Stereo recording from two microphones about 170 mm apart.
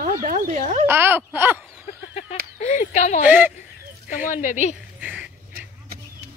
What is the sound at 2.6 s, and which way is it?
Speech, 40° left (ahead or behind).